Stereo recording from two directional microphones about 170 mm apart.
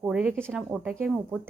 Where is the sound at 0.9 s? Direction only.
15° right (ahead or behind).